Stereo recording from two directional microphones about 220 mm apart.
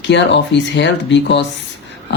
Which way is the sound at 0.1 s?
55° left (ahead or behind).